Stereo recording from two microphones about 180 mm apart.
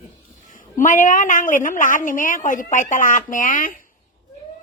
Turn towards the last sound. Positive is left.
turn(degrees=45)  # may be behind; listen again after turning